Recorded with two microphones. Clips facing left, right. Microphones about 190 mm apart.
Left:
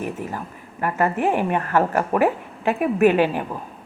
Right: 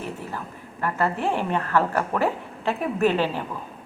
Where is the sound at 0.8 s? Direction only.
15° left (ahead or behind).